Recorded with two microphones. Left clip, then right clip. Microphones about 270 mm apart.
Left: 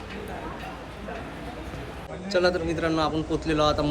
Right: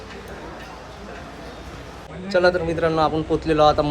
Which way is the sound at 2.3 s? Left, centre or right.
Centre.